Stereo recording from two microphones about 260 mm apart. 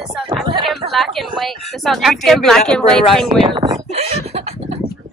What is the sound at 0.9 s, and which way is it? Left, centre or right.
Speech, centre.